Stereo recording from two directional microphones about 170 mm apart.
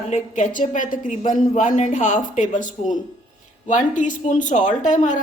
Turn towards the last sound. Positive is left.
turn(degrees=45)  # may be behind; listen again after turning